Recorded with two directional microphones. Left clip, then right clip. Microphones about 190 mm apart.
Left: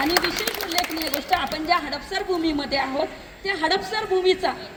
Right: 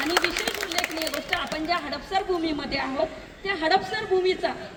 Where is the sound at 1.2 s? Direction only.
45° left (ahead or behind).